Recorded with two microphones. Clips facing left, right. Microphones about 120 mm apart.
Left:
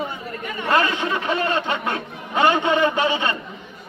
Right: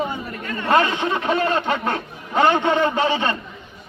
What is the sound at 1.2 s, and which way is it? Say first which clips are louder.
Speech: right 3 dB; 40° right (ahead or behind).